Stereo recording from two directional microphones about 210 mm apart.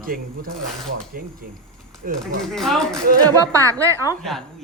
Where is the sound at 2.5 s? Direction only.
Centre (ahead or behind).